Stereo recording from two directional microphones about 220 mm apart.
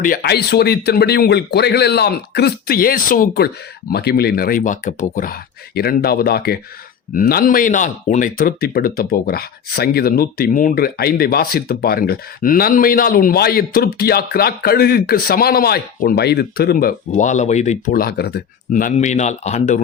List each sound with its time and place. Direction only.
0.0 s speech: 45° left (ahead or behind)